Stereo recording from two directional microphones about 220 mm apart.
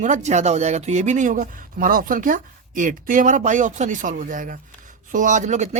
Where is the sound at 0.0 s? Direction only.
35° right (ahead or behind).